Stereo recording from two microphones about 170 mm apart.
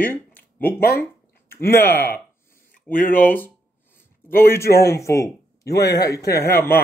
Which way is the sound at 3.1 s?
10° left (ahead or behind).